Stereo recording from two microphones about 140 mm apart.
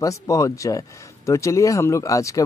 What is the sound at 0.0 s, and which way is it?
Speech, 25° left (ahead or behind).